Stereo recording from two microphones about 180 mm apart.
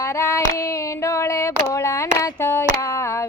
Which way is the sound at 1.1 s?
15° left (ahead or behind).